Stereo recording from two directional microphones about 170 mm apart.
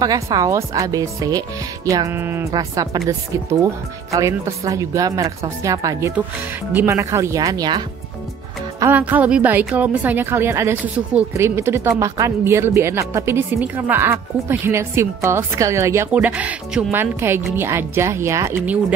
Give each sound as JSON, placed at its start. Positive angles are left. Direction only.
{"t": 0.0, "sound": "a woman's voice", "side_deg": -20}